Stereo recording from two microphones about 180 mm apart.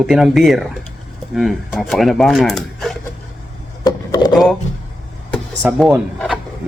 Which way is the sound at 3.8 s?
20° left (ahead or behind).